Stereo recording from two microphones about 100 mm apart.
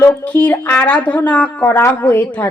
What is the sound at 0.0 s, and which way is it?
A woman's voice, 20° left (ahead or behind).